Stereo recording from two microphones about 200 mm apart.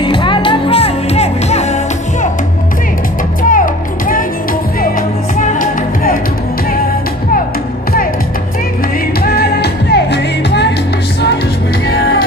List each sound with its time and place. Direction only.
0.0 s music: 25° left (ahead or behind)
3.4 s music: 40° left (ahead or behind)
9.2 s music: 50° left (ahead or behind)
11.9 s music: 50° left (ahead or behind)